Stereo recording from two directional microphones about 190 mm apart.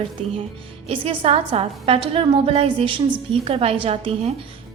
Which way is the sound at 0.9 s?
30° right (ahead or behind).